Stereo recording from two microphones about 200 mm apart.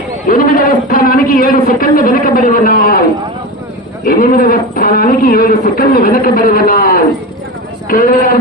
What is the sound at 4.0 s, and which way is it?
Speech, 45° left (ahead or behind).